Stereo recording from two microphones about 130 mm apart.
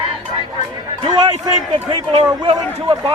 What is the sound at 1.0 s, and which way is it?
A man's voice, 30° right (ahead or behind).